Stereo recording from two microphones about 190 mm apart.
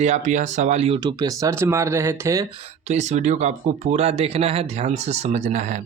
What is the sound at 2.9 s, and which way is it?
Speech, 40° right (ahead or behind).